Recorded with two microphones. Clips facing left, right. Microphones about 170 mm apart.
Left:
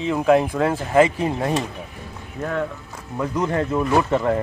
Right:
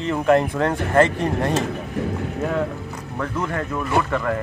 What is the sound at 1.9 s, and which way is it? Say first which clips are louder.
Clip-clop: right 13 dB; 75° right (ahead or behind).